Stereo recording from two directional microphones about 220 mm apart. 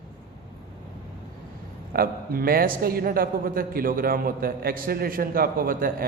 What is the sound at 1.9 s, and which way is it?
A man's voice, 40° right (ahead or behind).